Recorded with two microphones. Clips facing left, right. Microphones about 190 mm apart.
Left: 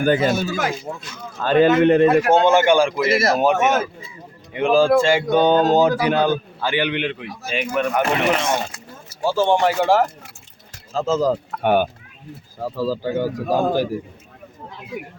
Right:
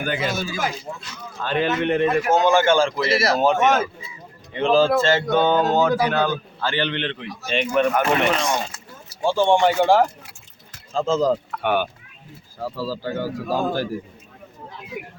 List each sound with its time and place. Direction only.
0.0 s a man's voice: 45° left (ahead or behind)
2.5 s speech: 15° left (ahead or behind)
3.1 s a man's voice: 50° left (ahead or behind)
3.3 s speech: 10° left (ahead or behind)
7.9 s speech: 20° left (ahead or behind)
9.2 s speech: 5° left (ahead or behind)
11.5 s a man's voice: 45° left (ahead or behind)
12.5 s speech: 15° left (ahead or behind)